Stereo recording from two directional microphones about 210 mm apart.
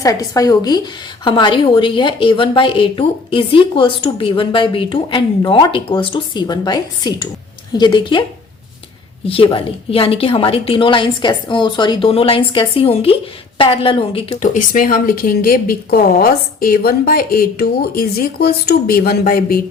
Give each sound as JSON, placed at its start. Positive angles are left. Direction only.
{"t": 0.0, "sound": "a woman's voice", "side_deg": 15}
{"t": 9.2, "sound": "a woman's voice", "side_deg": 25}